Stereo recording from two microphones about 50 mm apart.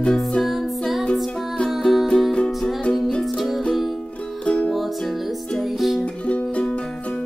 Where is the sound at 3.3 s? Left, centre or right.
Centre.